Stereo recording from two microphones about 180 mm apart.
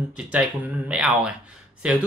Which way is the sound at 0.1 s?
5° right (ahead or behind).